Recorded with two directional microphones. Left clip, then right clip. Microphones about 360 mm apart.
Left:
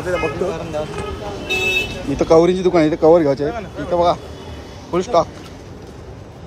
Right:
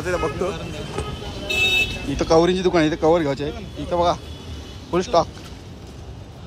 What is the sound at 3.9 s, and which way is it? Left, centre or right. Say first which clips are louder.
Speech: left 4 dB; centre.